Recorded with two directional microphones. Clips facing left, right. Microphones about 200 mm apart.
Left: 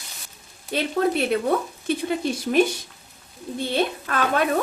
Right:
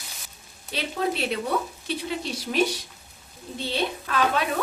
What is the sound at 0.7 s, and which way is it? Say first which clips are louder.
Speech: left 5 dB; 50° left (ahead or behind).